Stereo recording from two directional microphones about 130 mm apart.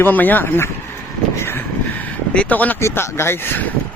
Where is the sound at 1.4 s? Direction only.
15° left (ahead or behind).